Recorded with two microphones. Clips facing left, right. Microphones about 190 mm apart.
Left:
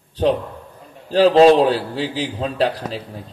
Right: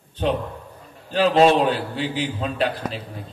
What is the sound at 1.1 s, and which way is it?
A man's voice, 35° left (ahead or behind).